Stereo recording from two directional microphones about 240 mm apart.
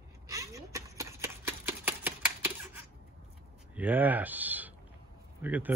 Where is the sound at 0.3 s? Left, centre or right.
Centre.